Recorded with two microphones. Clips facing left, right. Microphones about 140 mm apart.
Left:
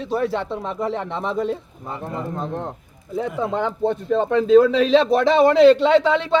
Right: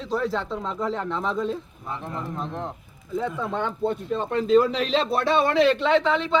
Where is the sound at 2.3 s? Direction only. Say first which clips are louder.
Left 5 dB; 45° left (ahead or behind).